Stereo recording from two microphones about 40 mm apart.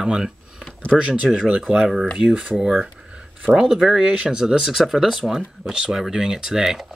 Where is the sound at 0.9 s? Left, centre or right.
Centre.